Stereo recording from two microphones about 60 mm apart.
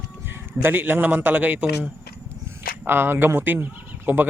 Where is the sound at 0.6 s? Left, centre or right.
Right.